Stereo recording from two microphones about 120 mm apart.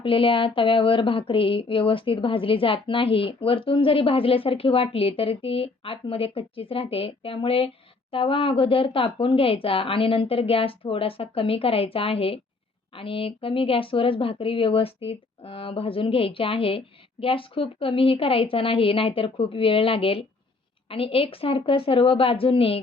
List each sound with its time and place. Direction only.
0.0 s speech: 50° left (ahead or behind)